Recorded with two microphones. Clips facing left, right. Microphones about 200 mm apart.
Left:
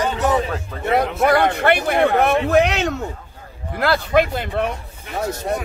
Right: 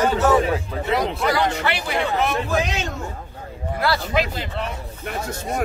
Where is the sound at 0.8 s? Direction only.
55° left (ahead or behind).